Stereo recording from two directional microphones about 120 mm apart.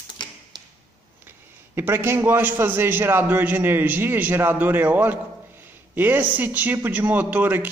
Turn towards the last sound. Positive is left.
turn(degrees=-15)  # may be behind; listen again after turning